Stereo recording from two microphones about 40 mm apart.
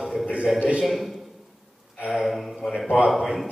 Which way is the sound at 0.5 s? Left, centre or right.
Right.